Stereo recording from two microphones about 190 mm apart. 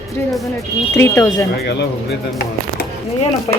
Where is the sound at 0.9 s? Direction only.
15° left (ahead or behind).